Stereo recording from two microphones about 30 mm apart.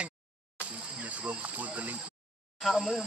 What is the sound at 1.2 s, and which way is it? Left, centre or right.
Cricket, right.